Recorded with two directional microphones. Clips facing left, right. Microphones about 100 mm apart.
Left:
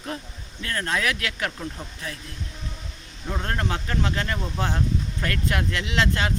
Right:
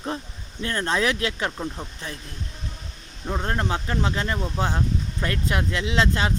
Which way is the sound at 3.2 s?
20° right (ahead or behind).